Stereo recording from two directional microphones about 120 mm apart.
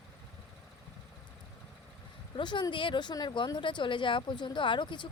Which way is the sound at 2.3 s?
40° left (ahead or behind).